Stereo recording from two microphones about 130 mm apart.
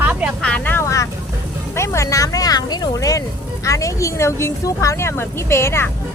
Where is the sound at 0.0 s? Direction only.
10° right (ahead or behind).